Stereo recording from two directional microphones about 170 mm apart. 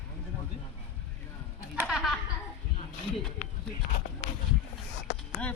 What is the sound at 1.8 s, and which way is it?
Speech, centre (ahead or behind).